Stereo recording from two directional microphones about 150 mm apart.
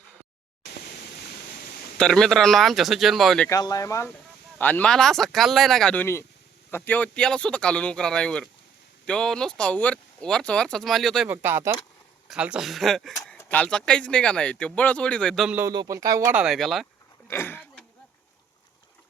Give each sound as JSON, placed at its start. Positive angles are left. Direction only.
{"t": 0.6, "sound": "a sound", "side_deg": 90}
{"t": 2.0, "sound": "speech", "side_deg": 5}
{"t": 3.5, "sound": "speech", "side_deg": 25}
{"t": 11.3, "sound": "speech", "side_deg": -15}
{"t": 13.3, "sound": "speech", "side_deg": 15}
{"t": 15.4, "sound": "speech", "side_deg": -10}
{"t": 15.7, "sound": "speech", "side_deg": -25}
{"t": 16.3, "sound": "speech", "side_deg": -5}
{"t": 17.2, "sound": "a sound", "side_deg": 15}